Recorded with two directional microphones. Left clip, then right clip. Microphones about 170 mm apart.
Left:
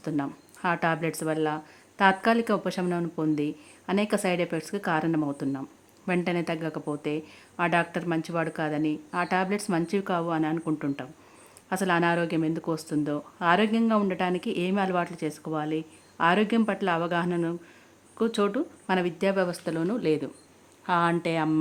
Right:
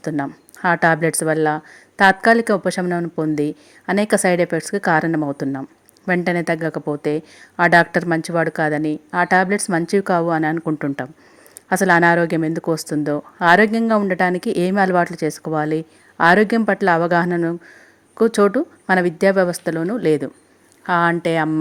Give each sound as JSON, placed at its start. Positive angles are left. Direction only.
{"t": 0.0, "sound": "a woman's voice", "side_deg": -25}